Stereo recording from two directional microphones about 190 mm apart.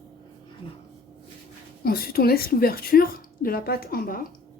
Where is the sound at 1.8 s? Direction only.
50° left (ahead or behind).